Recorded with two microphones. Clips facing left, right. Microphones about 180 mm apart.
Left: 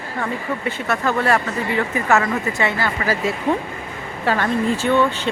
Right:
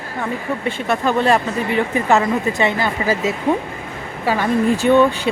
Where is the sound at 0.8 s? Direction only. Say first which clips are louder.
Right 3 dB; 15° right (ahead or behind).